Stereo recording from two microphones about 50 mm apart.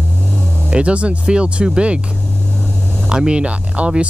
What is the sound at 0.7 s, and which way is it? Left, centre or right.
Speech, right.